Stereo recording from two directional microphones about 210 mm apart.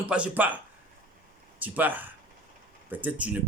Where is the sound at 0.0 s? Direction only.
5° right (ahead or behind).